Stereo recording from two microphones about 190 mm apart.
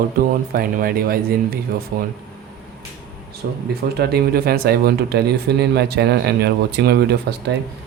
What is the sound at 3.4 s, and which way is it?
Speech, 55° right (ahead or behind).